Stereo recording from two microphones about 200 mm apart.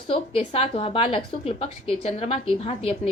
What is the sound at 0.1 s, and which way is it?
A woman's voice, 30° left (ahead or behind).